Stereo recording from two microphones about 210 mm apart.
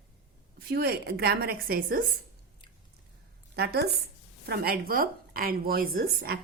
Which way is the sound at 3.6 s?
50° right (ahead or behind).